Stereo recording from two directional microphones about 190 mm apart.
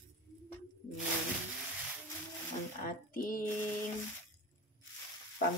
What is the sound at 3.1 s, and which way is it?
Female singing, 50° left (ahead or behind).